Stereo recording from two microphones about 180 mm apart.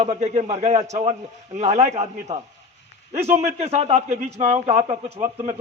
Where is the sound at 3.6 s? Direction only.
35° right (ahead or behind).